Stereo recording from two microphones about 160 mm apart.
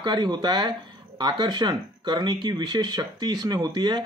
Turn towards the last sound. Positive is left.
turn(degrees=-25)  # may be behind; listen again after turning